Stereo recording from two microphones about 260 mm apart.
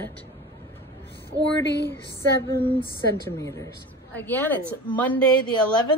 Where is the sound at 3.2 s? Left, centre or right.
Centre.